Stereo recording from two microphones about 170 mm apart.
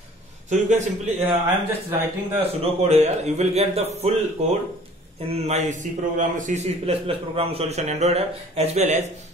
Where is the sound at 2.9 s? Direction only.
40° right (ahead or behind).